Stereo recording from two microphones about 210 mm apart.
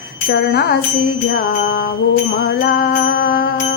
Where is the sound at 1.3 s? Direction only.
60° left (ahead or behind).